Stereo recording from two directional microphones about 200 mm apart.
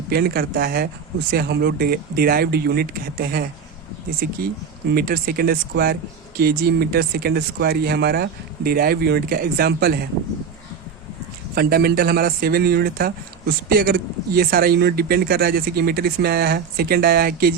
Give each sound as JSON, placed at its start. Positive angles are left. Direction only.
{"t": 0.1, "sound": "speech", "side_deg": -50}
{"t": 11.5, "sound": "speech", "side_deg": -50}